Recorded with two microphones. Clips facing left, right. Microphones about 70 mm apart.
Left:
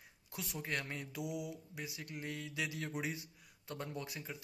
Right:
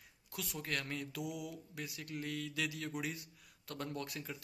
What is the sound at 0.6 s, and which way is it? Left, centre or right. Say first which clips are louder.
Mantra: even; left.